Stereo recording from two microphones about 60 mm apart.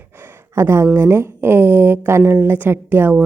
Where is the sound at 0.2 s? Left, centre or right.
Right.